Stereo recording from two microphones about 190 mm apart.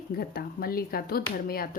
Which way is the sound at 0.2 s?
50° left (ahead or behind).